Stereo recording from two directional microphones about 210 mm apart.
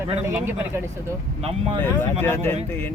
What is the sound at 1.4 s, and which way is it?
Speech, 30° right (ahead or behind).